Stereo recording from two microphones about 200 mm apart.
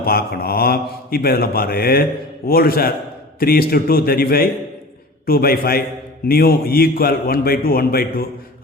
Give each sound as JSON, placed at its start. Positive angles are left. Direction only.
{"t": 0.0, "sound": "speech", "side_deg": 50}